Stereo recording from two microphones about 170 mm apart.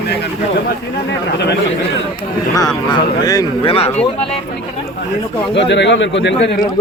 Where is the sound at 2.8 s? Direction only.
25° left (ahead or behind).